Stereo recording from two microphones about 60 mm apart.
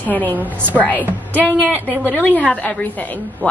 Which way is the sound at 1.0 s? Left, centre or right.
Right.